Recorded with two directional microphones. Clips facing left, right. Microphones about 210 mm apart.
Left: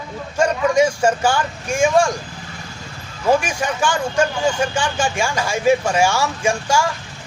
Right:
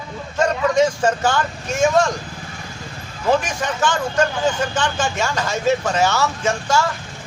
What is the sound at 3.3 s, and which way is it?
A man's voice, 10° left (ahead or behind).